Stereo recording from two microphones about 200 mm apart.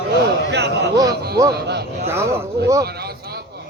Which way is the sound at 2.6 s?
55° right (ahead or behind).